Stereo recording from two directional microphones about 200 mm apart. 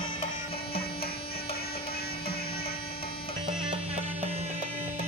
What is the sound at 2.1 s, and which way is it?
Music, 25° left (ahead or behind).